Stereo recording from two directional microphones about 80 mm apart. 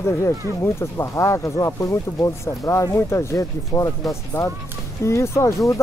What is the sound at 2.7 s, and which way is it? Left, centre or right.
Speech, left.